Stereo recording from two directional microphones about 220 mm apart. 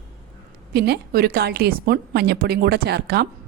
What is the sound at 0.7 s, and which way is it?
A woman's voice, 45° right (ahead or behind).